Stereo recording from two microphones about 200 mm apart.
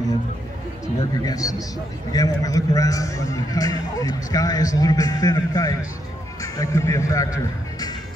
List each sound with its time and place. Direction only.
1.2 s a man's voice: 15° left (ahead or behind)